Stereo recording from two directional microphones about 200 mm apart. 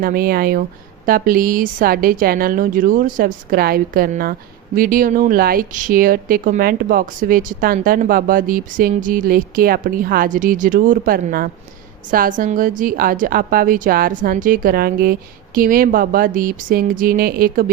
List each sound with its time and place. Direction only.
0.0 s speech: 45° right (ahead or behind)